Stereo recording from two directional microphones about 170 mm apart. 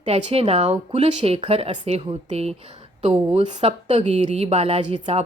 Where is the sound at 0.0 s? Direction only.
35° right (ahead or behind).